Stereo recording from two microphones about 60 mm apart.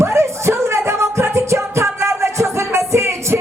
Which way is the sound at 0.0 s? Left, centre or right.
Right.